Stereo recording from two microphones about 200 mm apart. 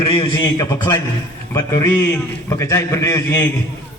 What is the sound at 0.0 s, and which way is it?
A man's voice, 25° left (ahead or behind).